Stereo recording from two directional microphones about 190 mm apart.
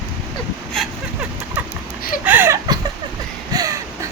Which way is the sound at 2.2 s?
10° right (ahead or behind).